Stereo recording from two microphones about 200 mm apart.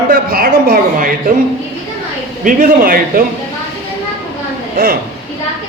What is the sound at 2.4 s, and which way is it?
Speech, 45° right (ahead or behind).